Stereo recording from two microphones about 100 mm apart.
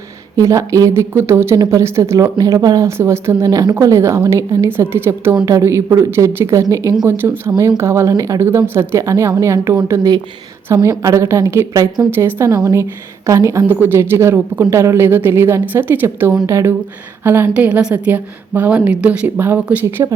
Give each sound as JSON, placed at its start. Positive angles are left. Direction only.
{"t": 0.3, "sound": "speech", "side_deg": -30}
{"t": 3.5, "sound": "a woman's voice", "side_deg": -40}
{"t": 5.5, "sound": "a woman's voice", "side_deg": -35}
{"t": 12.1, "sound": "a woman's voice", "side_deg": -25}
{"t": 17.5, "sound": "a woman's voice", "side_deg": -10}